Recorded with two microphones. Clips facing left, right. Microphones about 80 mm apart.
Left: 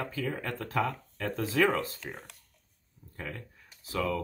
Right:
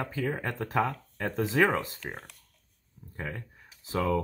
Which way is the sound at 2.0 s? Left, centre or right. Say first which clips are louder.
Right 2 dB; right.